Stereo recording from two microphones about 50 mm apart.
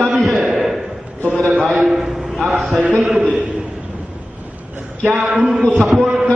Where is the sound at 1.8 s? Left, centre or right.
Centre.